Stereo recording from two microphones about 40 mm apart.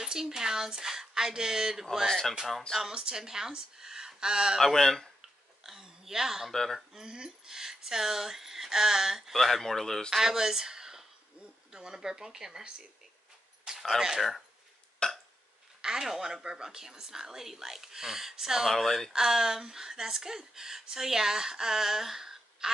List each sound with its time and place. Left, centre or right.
0.0 s speech: centre
2.0 s speech: centre
2.8 s speech: centre
4.6 s speech: centre
5.8 s a sound: centre
6.5 s speech: centre
7.0 s speech: centre
9.4 s speech: centre
10.1 s speech: centre
13.7 s speech: centre
15.0 s burping: left
15.8 s speech: centre
18.7 s speech: centre
19.1 s speech: centre